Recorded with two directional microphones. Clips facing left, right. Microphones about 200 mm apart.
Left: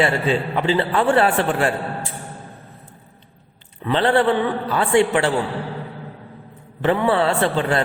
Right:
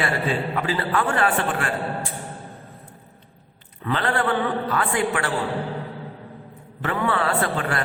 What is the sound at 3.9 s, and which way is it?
A man's voice, 30° left (ahead or behind).